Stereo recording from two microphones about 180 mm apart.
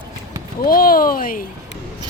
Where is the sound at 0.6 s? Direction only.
55° left (ahead or behind).